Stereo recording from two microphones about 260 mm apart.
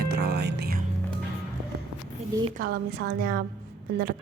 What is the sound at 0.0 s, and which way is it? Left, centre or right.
Music, right.